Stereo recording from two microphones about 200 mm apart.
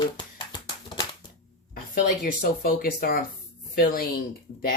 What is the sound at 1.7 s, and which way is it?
Speech, 45° left (ahead or behind).